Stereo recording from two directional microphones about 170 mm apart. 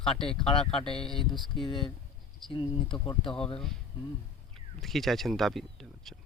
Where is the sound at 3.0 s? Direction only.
20° left (ahead or behind).